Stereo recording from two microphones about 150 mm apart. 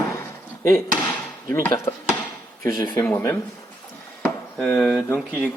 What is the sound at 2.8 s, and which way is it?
Speech, 30° left (ahead or behind).